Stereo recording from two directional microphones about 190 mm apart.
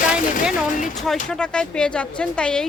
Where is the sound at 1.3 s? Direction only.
5° left (ahead or behind).